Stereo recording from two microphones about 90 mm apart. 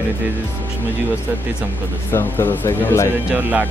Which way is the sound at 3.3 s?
20° right (ahead or behind).